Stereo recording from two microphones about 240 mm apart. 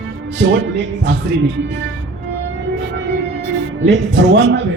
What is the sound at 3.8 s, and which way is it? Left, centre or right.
Speech, right.